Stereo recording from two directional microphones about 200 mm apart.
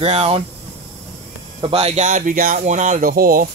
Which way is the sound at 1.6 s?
30° right (ahead or behind).